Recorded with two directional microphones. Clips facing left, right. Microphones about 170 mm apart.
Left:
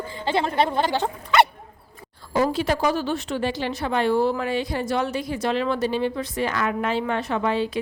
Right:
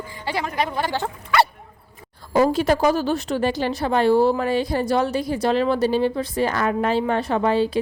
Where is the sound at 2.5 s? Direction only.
45° right (ahead or behind).